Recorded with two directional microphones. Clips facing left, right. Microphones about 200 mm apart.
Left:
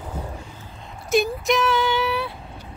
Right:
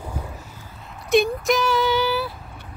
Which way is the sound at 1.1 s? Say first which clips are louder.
Right 2 dB; centre (ahead or behind).